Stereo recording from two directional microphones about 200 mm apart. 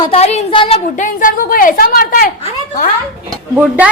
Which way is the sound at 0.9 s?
40° left (ahead or behind).